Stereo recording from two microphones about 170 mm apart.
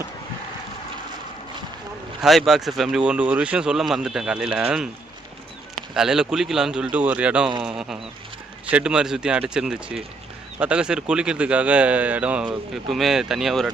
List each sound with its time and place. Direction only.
2.2 s a man's voice: centre (ahead or behind)
5.9 s a man's voice: 5° right (ahead or behind)